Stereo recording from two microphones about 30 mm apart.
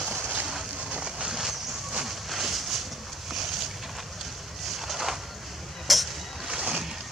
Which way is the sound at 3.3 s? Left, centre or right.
Centre.